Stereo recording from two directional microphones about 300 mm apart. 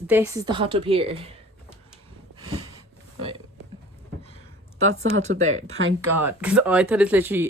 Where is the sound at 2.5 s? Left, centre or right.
Centre.